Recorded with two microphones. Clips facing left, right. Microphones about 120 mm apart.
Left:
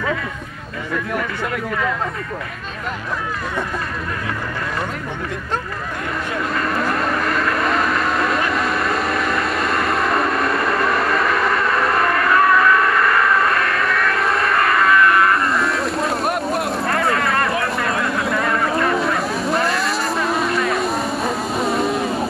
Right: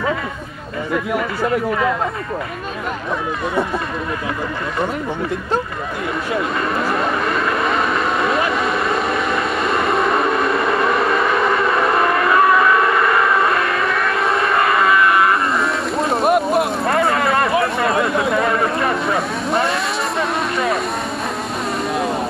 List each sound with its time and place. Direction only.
6.3 s vehicle: 5° right (ahead or behind)
18.0 s a sound: centre (ahead or behind)
18.5 s vehicle: centre (ahead or behind)
21.5 s music: centre (ahead or behind)